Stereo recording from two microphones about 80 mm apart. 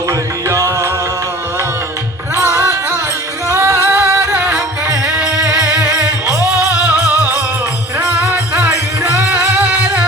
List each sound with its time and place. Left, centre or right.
0.4 s music: right
2.3 s music: right
4.5 s music: centre